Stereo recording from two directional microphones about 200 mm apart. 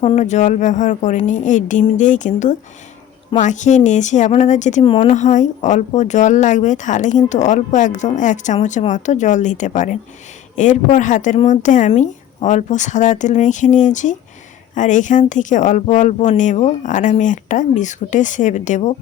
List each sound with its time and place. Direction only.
0.0 s speech: 35° left (ahead or behind)